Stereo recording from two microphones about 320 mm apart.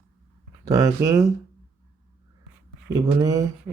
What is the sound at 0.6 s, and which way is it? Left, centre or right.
Speech, centre.